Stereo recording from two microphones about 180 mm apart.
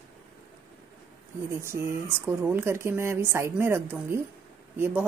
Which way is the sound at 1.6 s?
15° right (ahead or behind).